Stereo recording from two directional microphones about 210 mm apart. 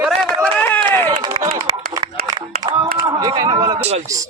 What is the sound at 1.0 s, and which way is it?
Speech, 20° right (ahead or behind).